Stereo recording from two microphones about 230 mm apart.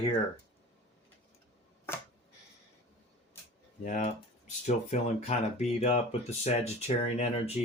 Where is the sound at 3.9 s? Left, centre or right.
Left.